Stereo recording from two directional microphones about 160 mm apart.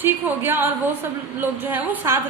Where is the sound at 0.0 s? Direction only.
10° right (ahead or behind).